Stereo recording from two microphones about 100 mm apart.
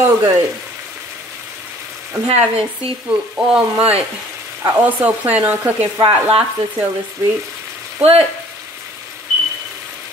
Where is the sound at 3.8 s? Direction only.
90° right.